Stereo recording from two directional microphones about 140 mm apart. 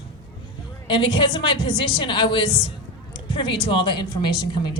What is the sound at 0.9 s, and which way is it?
A woman's voice, 35° left (ahead or behind).